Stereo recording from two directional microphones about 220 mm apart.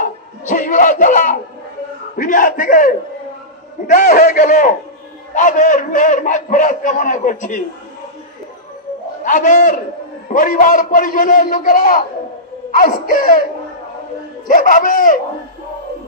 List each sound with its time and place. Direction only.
0.0 s a sound: 35° left (ahead or behind)
2.1 s a man's voice: 35° left (ahead or behind)
9.2 s a man's voice: 35° left (ahead or behind)
14.5 s a man's voice: 40° left (ahead or behind)